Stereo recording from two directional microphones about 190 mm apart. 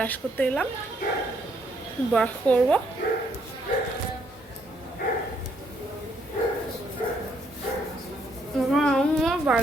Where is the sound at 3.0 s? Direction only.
55° left (ahead or behind).